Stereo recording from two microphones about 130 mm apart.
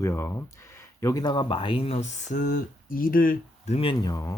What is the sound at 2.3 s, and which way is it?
Speech, 90° left.